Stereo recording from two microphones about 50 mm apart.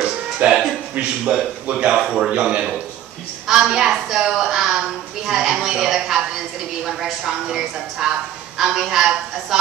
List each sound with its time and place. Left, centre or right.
0.0 s music: centre
0.9 s a man's voice: right